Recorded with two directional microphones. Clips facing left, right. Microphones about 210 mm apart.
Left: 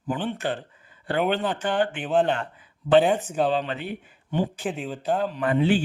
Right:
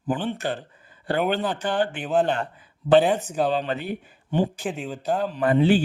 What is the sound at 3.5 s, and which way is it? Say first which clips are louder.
Speech: right 1 dB; 40° right (ahead or behind).